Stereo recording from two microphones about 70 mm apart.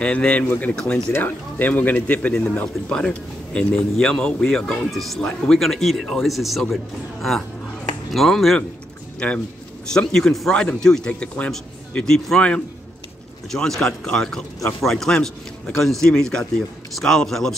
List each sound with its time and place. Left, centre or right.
0.0 s speech: centre
0.7 s speech: centre
1.1 s speech: left; by 8.5 s centre
9.2 s speech: centre